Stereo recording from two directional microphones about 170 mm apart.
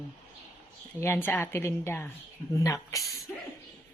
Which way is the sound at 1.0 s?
15° left (ahead or behind).